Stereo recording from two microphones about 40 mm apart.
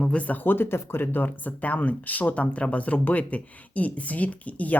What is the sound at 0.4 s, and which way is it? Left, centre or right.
Speech, left.